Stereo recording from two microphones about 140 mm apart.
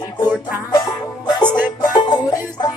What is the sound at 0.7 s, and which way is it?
Music, 30° left (ahead or behind).